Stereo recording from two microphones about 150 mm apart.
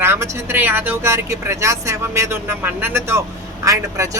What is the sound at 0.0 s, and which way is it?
Speech, 15° right (ahead or behind).